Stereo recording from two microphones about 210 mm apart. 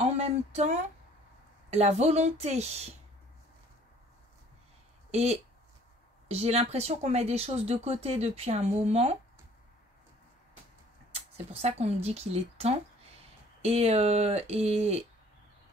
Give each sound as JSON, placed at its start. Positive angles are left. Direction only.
{"t": 0.0, "sound": "a woman's voice", "side_deg": -30}
{"t": 5.1, "sound": "a woman's voice", "side_deg": -30}
{"t": 11.1, "sound": "speech", "side_deg": -30}